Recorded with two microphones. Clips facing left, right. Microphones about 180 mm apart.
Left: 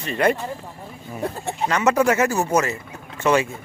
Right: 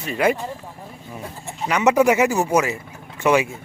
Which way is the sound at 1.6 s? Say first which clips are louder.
Right 2 dB; 10° right (ahead or behind).